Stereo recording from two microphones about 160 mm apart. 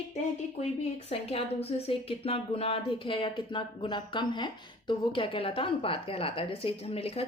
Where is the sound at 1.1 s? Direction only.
40° left (ahead or behind).